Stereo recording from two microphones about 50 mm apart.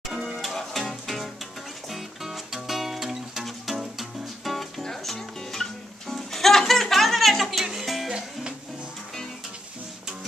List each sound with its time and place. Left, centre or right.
0.1 s music: centre